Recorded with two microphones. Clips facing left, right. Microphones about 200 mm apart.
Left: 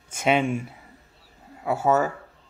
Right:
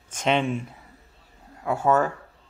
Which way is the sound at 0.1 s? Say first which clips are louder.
Left 1 dB; 10° left (ahead or behind).